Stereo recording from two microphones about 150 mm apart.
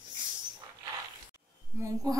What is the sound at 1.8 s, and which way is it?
Speech, 20° right (ahead or behind).